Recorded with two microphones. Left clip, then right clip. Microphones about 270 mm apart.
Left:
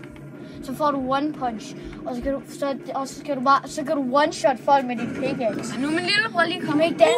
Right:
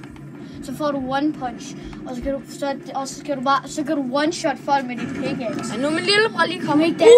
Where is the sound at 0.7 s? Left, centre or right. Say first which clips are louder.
Left 1 dB; centre.